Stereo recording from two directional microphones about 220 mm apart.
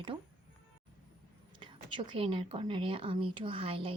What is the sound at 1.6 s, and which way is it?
A woman's voice, 20° right (ahead or behind).